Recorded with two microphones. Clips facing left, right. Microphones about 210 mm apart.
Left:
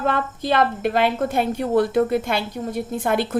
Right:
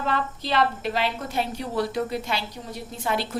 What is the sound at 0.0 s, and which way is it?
A woman's voice, 50° left (ahead or behind).